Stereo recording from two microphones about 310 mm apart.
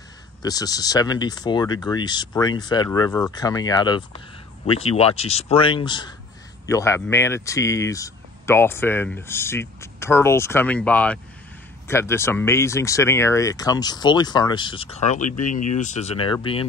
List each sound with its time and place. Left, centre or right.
0.4 s speech: centre